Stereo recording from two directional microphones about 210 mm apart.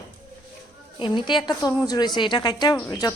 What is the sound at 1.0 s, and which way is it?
A woman's voice, 20° left (ahead or behind).